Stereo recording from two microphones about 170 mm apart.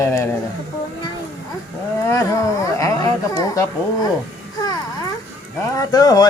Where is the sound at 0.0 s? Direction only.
15° left (ahead or behind).